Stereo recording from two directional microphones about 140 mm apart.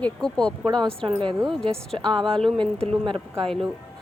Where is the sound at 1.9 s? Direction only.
35° right (ahead or behind).